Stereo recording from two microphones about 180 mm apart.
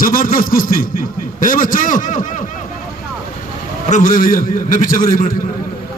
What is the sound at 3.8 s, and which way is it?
A man's voice, 45° left (ahead or behind).